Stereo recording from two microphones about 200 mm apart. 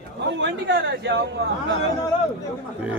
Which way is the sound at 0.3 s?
60° right (ahead or behind).